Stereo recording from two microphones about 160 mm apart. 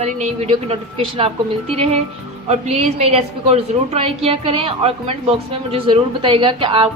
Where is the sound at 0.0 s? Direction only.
45° right (ahead or behind).